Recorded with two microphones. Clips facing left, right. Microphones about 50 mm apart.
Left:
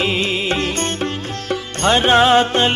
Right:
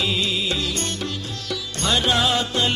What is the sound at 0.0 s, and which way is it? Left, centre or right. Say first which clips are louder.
Music: left 5 dB; left.